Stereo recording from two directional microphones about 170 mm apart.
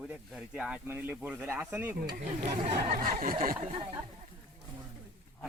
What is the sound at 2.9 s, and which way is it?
Snicker, 55° right (ahead or behind).